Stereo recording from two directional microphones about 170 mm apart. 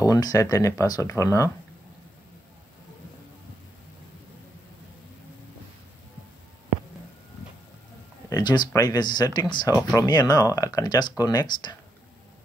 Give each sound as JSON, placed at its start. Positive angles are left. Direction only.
{"t": 0.0, "sound": "speech", "side_deg": 20}
{"t": 8.3, "sound": "speech", "side_deg": 25}